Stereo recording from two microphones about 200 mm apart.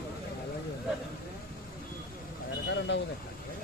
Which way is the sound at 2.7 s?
60° left (ahead or behind).